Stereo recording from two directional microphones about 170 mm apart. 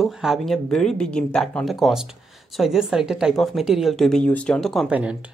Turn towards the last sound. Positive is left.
turn(degrees=-10)  # may be behind; listen again after turning